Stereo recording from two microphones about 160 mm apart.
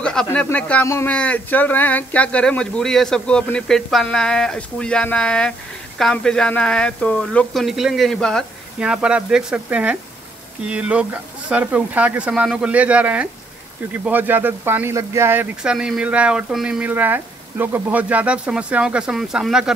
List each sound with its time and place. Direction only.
0.0 s speech: 5° left (ahead or behind)
8.7 s speech: 5° right (ahead or behind)